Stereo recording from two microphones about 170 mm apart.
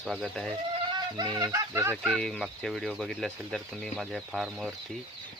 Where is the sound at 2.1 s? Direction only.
5° left (ahead or behind).